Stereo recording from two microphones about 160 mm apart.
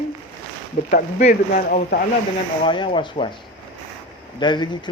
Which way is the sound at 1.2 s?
55° left (ahead or behind).